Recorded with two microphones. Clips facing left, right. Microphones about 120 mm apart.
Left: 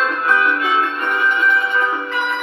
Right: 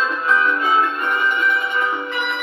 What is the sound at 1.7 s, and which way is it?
Music, 45° left (ahead or behind).